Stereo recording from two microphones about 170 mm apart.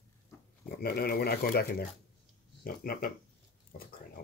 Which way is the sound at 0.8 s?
65° left (ahead or behind).